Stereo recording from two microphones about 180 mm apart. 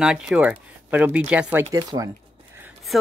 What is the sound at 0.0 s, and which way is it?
Speech, 5° right (ahead or behind).